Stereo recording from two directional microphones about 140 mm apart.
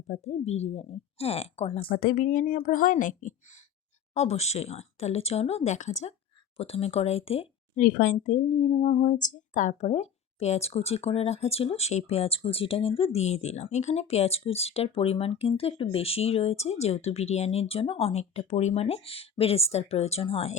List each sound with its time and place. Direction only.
0.1 s speech: 50° left (ahead or behind)
1.9 s speech: 90° left; by 3.3 s 65° left (ahead or behind)
4.1 s speech: 50° left (ahead or behind)
7.8 s speech: 70° left (ahead or behind)
8.1 s speech: 60° left (ahead or behind)